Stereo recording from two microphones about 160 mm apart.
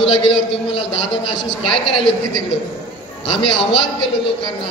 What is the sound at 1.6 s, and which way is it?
Speech, 35° left (ahead or behind).